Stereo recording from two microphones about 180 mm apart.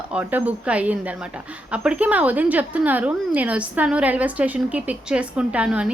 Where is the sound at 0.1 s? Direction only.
10° right (ahead or behind).